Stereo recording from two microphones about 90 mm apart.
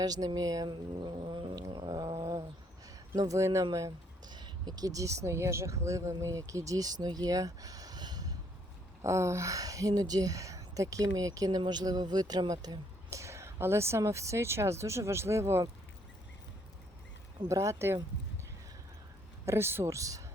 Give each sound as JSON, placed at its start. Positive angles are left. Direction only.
{"t": 0.0, "sound": "cat", "side_deg": -45}
{"t": 1.2, "sound": "cat", "side_deg": -70}
{"t": 1.5, "sound": "a sound", "side_deg": -60}
{"t": 2.0, "sound": "a sound", "side_deg": -40}
{"t": 3.2, "sound": "speech", "side_deg": -35}
{"t": 4.3, "sound": "speech", "side_deg": -55}
{"t": 9.0, "sound": "speech", "side_deg": -35}
{"t": 17.5, "sound": "speech", "side_deg": -35}
{"t": 19.5, "sound": "speech", "side_deg": -30}